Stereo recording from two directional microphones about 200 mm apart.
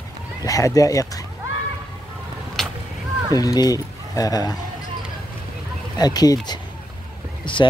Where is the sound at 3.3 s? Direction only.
20° left (ahead or behind).